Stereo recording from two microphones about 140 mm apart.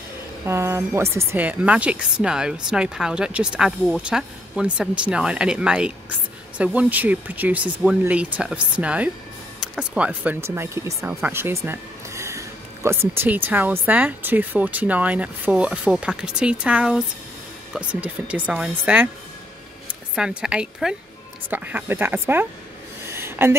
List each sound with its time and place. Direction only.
0.5 s speech: 20° right (ahead or behind)
20.2 s speech: 5° right (ahead or behind)
23.1 s a sound: 15° right (ahead or behind)